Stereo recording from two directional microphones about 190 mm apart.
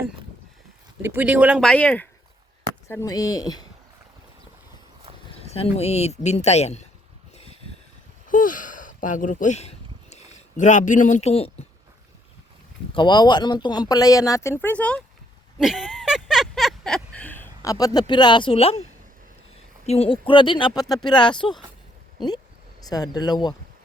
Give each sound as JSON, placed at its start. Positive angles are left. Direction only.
{"t": 1.0, "sound": "speech", "side_deg": -10}
{"t": 5.4, "sound": "speech", "side_deg": 30}
{"t": 8.3, "sound": "a sound", "side_deg": 45}
{"t": 12.9, "sound": "speech", "side_deg": 25}
{"t": 15.5, "sound": "a sound", "side_deg": 0}
{"t": 19.8, "sound": "speech", "side_deg": 35}
{"t": 22.8, "sound": "speech", "side_deg": 20}